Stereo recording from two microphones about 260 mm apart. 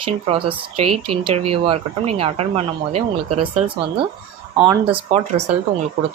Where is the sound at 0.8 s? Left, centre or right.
Right.